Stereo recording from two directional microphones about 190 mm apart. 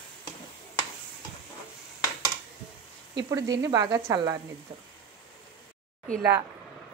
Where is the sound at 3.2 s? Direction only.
15° right (ahead or behind).